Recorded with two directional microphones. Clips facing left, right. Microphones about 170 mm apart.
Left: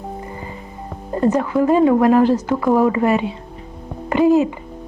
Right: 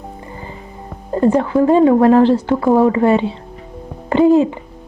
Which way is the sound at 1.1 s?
30° right (ahead or behind).